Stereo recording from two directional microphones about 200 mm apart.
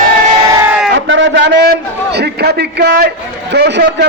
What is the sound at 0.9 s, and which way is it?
A man's voice, 65° right (ahead or behind).